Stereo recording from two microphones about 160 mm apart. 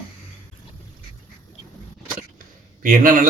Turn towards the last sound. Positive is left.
turn(degrees=-60)  # may be behind; listen again after turning